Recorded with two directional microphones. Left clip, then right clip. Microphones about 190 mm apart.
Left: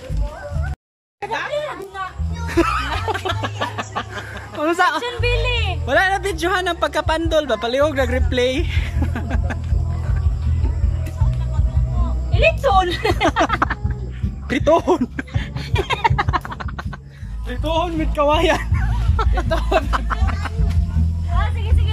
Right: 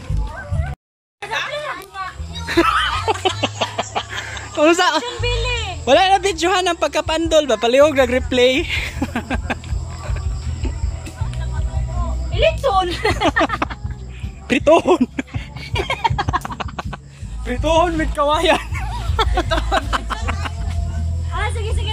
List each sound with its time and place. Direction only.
2.4 s music: 5° left (ahead or behind)
3.1 s music: 10° right (ahead or behind)
3.6 s music: 50° left (ahead or behind)
4.6 s a man's voice: 5° right (ahead or behind)
5.2 s music: 15° left (ahead or behind)
5.9 s a man's voice: 10° right (ahead or behind)
12.3 s a sound: centre (ahead or behind)
17.5 s a man's voice: 5° right (ahead or behind)
18.5 s a sound: 5° right (ahead or behind)
19.7 s music: centre (ahead or behind)